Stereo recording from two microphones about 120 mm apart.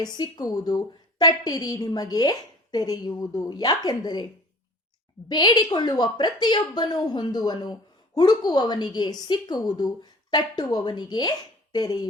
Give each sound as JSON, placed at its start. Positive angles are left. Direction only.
{"t": 0.0, "sound": "a woman's voice", "side_deg": 35}
{"t": 5.3, "sound": "a woman's voice", "side_deg": 35}